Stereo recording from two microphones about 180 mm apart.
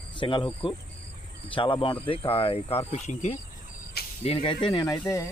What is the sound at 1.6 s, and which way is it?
Speech, 25° left (ahead or behind).